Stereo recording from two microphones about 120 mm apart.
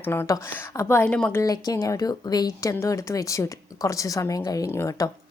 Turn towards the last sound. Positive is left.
turn(degrees=25)  # may be behind; listen again after turning